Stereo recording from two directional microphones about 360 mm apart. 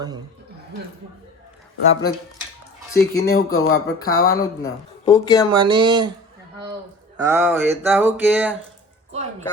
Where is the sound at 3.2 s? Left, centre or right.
Left.